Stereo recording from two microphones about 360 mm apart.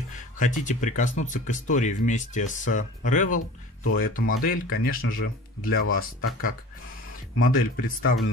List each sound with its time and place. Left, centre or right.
0.4 s speech: centre
7.4 s speech: left